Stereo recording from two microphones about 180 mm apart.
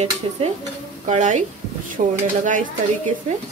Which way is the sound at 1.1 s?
45° right (ahead or behind).